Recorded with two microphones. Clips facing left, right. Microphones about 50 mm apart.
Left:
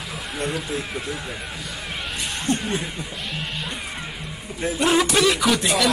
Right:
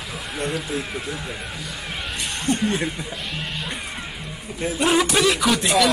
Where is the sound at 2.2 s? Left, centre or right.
Centre.